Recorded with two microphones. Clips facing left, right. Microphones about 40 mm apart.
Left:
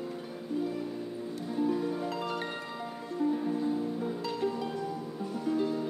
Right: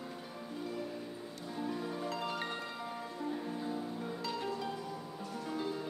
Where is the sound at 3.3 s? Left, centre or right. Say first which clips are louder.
Left 8 dB; centre.